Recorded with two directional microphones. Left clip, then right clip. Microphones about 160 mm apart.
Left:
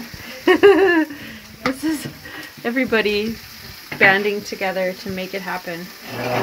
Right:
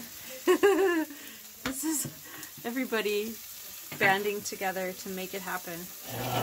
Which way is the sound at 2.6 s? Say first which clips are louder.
Left 12 dB; 10° left (ahead or behind).